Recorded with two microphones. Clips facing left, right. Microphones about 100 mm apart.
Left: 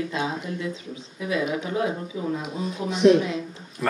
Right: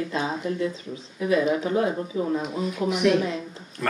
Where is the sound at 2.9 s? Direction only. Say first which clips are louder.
Left 5 dB; 25° left (ahead or behind).